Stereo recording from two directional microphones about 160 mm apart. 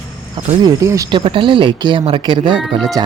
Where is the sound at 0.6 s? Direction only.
20° right (ahead or behind).